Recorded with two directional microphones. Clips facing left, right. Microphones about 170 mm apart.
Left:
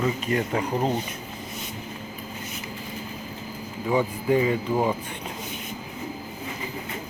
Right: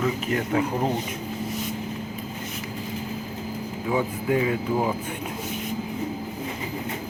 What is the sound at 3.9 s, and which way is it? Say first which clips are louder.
Speech: left 2 dB; centre (ahead or behind).